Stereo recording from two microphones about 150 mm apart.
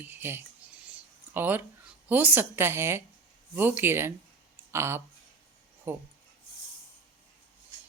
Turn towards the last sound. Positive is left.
turn(degrees=-15)  # may be behind; listen again after turning